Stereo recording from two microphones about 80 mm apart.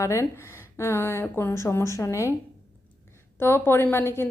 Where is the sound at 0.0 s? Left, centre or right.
Left.